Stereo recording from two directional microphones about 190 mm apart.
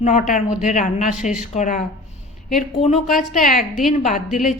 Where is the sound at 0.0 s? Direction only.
40° left (ahead or behind).